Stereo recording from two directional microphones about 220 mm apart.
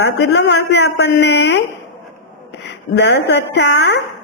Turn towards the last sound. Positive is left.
turn(degrees=50)  # may be behind; listen again after turning